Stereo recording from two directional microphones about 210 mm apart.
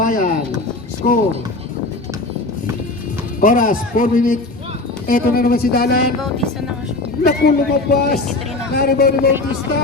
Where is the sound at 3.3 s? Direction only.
40° left (ahead or behind).